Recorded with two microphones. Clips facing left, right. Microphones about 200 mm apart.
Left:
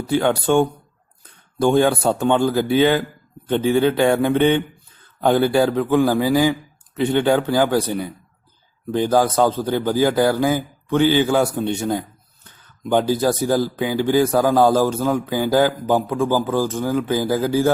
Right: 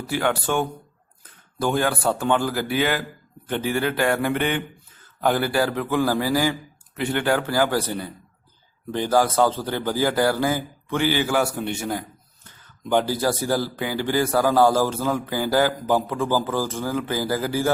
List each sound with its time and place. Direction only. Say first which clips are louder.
0.2 s a man's voice: left 6 dB; 20° left (ahead or behind)
12.9 s a man's voice: left 4 dB; 15° left (ahead or behind)